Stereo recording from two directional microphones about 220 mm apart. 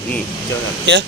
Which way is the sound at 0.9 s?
55° right (ahead or behind).